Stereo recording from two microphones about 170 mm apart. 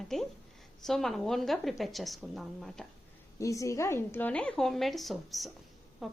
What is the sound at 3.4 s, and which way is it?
A woman's voice, 20° left (ahead or behind).